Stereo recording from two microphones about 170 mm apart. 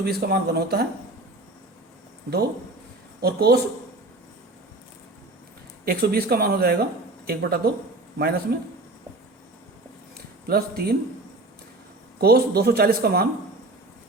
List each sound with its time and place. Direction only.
0.0 s speech: 70° right (ahead or behind)
3.2 s a man's voice: 70° right (ahead or behind)
5.8 s speech: 60° right (ahead or behind)
10.4 s speech: 65° right (ahead or behind)
12.2 s speech: 65° right (ahead or behind)